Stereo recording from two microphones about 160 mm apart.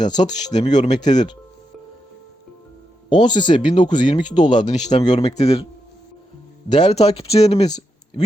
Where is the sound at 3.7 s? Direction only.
50° left (ahead or behind).